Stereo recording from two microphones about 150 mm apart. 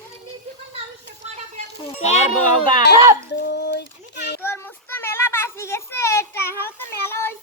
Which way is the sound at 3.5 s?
90° left.